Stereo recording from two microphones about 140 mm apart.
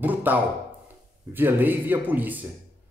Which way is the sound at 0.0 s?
10° right (ahead or behind).